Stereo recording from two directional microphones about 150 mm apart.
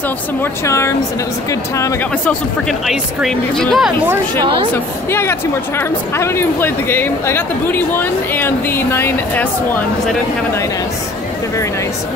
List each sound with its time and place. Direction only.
0.4 s speech: 20° left (ahead or behind)
2.9 s speech: centre (ahead or behind)
5.1 s speech: 15° left (ahead or behind)